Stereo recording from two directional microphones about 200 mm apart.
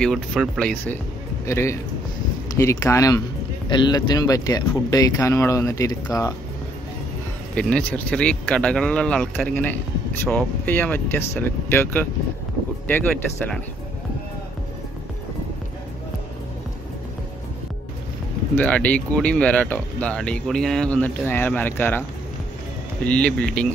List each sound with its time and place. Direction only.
0.0 s a man's voice: centre (ahead or behind); by 6.3 s 20° left (ahead or behind)
7.5 s speech: 5° left (ahead or behind)
18.5 s speech: 5° left (ahead or behind)
23.0 s speech: 5° left (ahead or behind)